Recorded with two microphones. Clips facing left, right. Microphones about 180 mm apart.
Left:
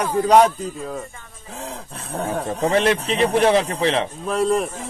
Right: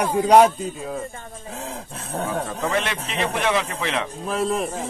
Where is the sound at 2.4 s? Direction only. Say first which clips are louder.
Left 6 dB; 35° left (ahead or behind).